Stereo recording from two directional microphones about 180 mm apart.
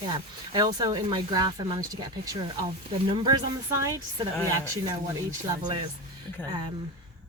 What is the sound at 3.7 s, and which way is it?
Speech, 15° right (ahead or behind).